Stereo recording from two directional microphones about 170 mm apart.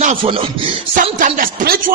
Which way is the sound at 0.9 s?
50° right (ahead or behind).